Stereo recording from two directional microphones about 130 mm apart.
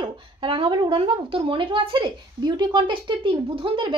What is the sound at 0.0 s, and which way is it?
A woman's voice, 40° right (ahead or behind).